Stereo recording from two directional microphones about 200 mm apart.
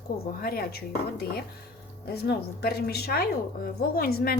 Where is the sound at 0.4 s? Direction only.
45° left (ahead or behind).